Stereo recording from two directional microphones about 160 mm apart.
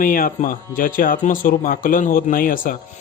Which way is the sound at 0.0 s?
60° left (ahead or behind).